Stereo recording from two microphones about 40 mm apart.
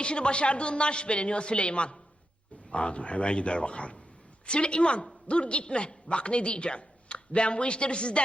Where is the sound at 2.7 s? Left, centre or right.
Left.